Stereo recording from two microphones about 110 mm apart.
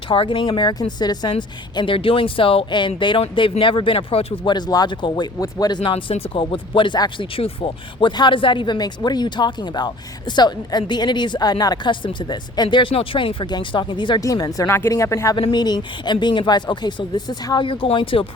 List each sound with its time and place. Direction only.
0.1 s speech: 50° left (ahead or behind)
4.4 s speech: 40° left (ahead or behind)
14.3 s speech: 35° left (ahead or behind)
15.5 s speech: 40° left (ahead or behind)